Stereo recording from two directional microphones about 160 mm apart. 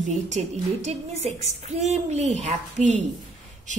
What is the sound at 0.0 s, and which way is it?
A woman's voice, 45° right (ahead or behind).